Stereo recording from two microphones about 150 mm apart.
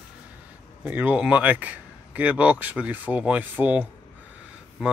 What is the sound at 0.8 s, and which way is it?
Speech, 10° right (ahead or behind).